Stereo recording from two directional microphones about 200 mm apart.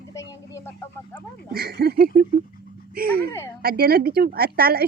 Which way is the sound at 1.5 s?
50° right (ahead or behind).